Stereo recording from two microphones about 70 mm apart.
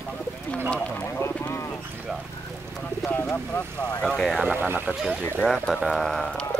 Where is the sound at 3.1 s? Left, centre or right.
Left.